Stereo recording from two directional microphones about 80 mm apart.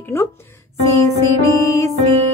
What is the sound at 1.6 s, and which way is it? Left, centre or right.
Music, left.